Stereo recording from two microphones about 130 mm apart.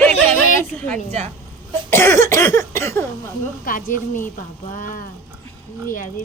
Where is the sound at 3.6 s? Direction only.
90° left.